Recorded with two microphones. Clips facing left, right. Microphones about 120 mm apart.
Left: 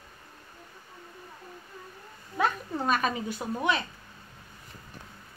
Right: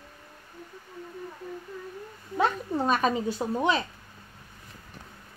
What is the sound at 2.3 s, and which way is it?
Speech, 25° right (ahead or behind).